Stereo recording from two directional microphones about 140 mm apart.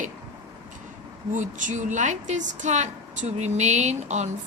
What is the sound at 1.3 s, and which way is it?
A woman's voice, 65° right (ahead or behind).